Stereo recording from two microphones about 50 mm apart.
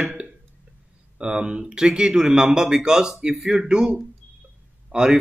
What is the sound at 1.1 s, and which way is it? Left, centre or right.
A man's voice, centre.